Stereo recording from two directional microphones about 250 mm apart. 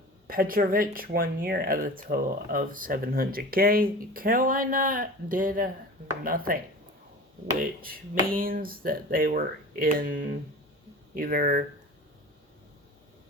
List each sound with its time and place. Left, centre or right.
0.3 s speech: right
7.8 s speech: right